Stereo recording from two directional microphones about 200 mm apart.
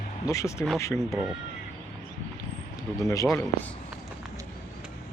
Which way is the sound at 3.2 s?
5° left (ahead or behind).